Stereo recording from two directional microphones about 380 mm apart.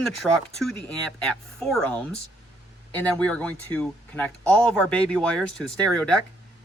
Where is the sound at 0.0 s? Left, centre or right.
Centre.